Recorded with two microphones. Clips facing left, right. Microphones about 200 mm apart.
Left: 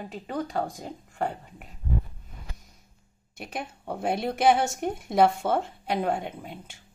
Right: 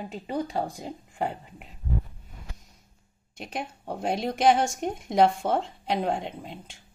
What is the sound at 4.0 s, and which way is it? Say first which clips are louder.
Speech: even; 55° left (ahead or behind).